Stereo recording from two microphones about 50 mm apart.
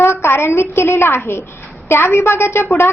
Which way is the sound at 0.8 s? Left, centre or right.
Left.